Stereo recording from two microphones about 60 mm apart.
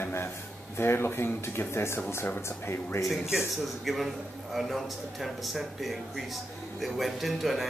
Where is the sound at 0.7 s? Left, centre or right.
Left.